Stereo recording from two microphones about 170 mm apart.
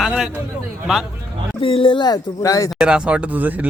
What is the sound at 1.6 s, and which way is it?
Speech, 30° left (ahead or behind).